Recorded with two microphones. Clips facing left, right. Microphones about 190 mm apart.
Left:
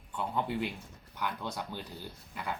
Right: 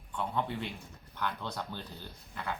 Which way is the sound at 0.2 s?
10° left (ahead or behind).